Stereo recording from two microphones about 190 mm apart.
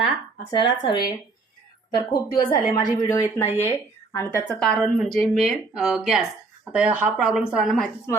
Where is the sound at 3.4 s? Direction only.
35° left (ahead or behind).